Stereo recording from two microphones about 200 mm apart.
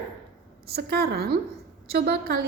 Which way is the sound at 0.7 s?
50° right (ahead or behind).